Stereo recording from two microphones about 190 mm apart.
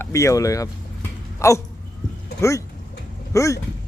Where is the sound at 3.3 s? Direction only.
15° left (ahead or behind).